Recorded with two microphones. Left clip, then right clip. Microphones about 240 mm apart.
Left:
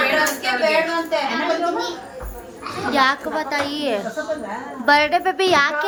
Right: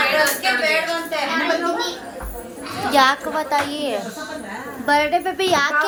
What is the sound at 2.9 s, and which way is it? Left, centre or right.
A woman's voice, centre.